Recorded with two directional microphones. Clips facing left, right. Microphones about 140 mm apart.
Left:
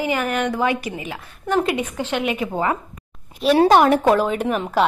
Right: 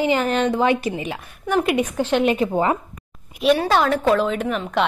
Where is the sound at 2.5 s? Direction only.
20° right (ahead or behind).